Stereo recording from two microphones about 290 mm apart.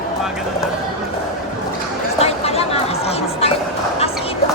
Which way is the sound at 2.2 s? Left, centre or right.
Left.